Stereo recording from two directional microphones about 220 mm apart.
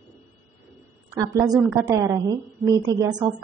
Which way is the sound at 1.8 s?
15° right (ahead or behind).